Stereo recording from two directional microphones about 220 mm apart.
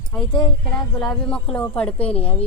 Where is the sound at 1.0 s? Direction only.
5° left (ahead or behind).